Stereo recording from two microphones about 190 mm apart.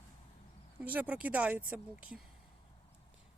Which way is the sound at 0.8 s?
10° right (ahead or behind).